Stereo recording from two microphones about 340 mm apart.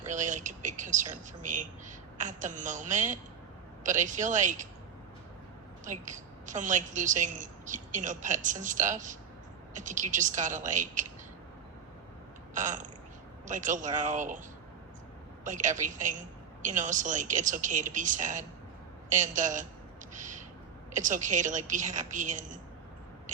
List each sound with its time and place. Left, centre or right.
0.1 s speech: right
5.8 s a woman's voice: right
12.5 s a sound: right
13.5 s speech: right
15.4 s speech: right
20.1 s a sound: right
20.9 s speech: right